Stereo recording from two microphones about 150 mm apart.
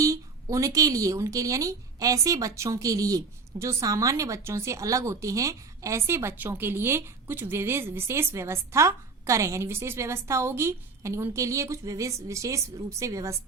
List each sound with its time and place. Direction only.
0.0 s speech: 20° right (ahead or behind)